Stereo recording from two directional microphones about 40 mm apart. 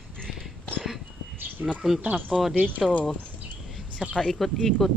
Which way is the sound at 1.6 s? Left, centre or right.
Right.